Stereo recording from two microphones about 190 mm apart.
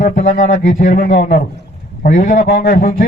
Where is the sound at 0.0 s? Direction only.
45° left (ahead or behind).